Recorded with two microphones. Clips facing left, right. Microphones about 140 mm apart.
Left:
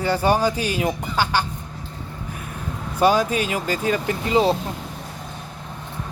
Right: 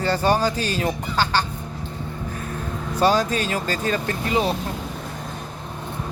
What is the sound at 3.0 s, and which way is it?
Speech, 10° left (ahead or behind).